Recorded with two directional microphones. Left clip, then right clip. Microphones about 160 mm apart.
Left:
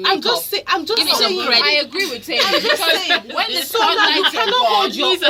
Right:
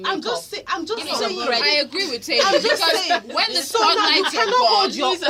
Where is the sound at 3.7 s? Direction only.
45° right (ahead or behind).